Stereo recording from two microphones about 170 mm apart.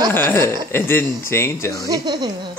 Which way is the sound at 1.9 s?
25° right (ahead or behind).